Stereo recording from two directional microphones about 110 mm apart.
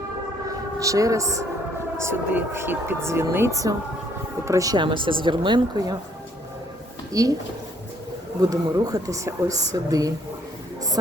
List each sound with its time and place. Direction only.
0.8 s speech: 30° right (ahead or behind)
5.0 s speech: 50° right (ahead or behind)
5.7 s speech: 35° right (ahead or behind)
7.1 s speech: 30° right (ahead or behind)
8.4 s speech: 35° right (ahead or behind)